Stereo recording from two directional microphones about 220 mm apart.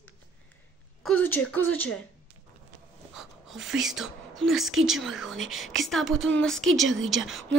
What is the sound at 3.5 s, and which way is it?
Speech, centre (ahead or behind).